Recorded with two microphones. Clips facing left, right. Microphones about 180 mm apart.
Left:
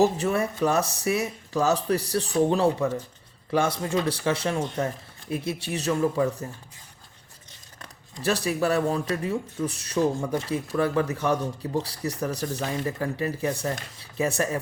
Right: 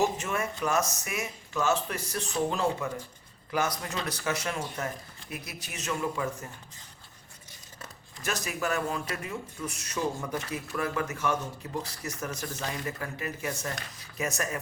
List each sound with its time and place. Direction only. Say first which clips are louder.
0.0 s speech: left 7 dB; 35° left (ahead or behind)
8.2 s speech: left 8 dB; 35° left (ahead or behind)